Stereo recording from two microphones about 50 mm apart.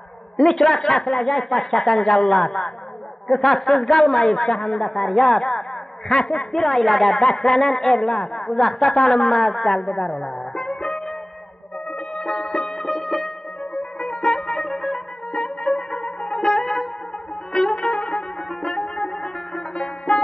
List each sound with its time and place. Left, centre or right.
0.4 s speech: centre
6.6 s a woman's voice: centre
7.9 s a woman's voice: centre
10.0 s music: centre
13.9 s music: centre
15.3 s music: centre